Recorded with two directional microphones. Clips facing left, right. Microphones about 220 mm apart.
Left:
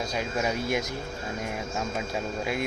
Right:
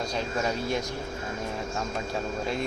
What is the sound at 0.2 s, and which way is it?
Speech, 10° left (ahead or behind).